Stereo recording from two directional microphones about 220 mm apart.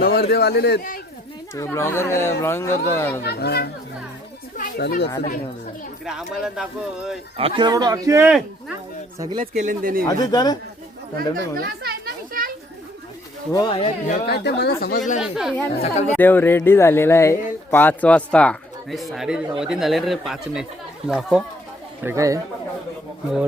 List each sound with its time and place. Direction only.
0.0 s a man's voice: 45° left (ahead or behind)
1.5 s speech: 10° left (ahead or behind)
3.2 s a man's voice: 45° left (ahead or behind)
6.1 s speech: centre (ahead or behind)
7.3 s speech: 25° right (ahead or behind)
9.4 s speech: 35° right (ahead or behind)
10.1 s speech: 15° left (ahead or behind)
11.2 s children playing: 45° right (ahead or behind)
13.5 s speech: 20° left (ahead or behind)
14.3 s a man's voice: 50° left (ahead or behind)
15.2 s speech: centre (ahead or behind)
15.8 s speech: 30° left (ahead or behind)
16.1 s speech: 10° left (ahead or behind)
22.0 s speech: 15° right (ahead or behind)